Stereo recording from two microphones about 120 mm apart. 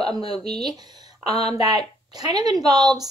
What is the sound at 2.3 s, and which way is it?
Speech, 35° right (ahead or behind).